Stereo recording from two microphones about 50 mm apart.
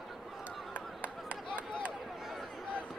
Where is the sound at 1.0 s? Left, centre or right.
Right.